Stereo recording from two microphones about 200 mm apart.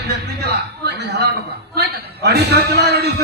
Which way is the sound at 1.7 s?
55° right (ahead or behind).